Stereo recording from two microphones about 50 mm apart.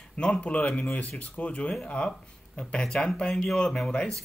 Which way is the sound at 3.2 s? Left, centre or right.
Centre.